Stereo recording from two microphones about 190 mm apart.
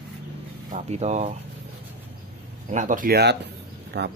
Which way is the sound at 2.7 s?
40° right (ahead or behind).